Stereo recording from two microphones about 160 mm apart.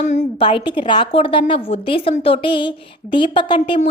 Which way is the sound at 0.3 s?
30° left (ahead or behind).